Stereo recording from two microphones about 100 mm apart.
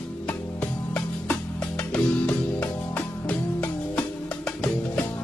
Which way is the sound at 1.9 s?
15° left (ahead or behind).